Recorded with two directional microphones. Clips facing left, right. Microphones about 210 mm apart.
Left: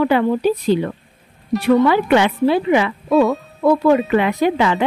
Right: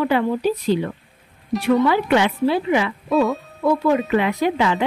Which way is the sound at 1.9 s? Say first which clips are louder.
Left 3 dB; 65° left (ahead or behind).